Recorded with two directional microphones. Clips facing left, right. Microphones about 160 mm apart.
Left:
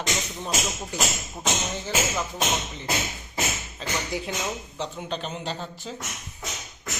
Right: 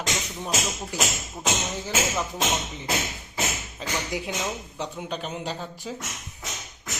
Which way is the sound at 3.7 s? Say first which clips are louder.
Even; 15° right (ahead or behind).